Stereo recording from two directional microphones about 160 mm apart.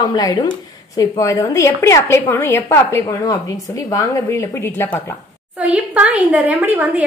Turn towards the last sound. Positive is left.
turn(degrees=-10)  # may be behind; listen again after turning